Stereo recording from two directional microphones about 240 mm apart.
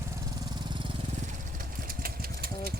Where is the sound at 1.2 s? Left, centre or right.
Right.